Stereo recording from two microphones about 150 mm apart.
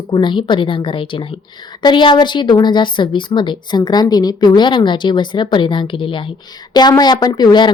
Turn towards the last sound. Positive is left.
turn(degrees=30)  # may be behind; listen again after turning